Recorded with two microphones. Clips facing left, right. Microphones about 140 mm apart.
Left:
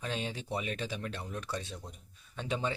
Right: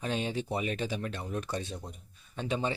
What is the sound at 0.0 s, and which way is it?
Speech, 20° right (ahead or behind).